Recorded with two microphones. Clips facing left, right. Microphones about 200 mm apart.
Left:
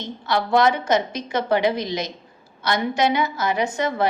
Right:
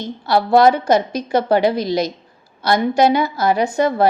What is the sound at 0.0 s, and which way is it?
A woman's voice, 35° right (ahead or behind).